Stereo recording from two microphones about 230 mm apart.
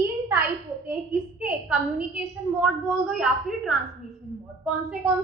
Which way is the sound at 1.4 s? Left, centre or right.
Centre.